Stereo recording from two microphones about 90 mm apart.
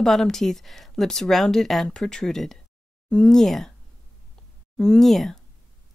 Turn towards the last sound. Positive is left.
turn(degrees=0)  # may be behind; listen again after turning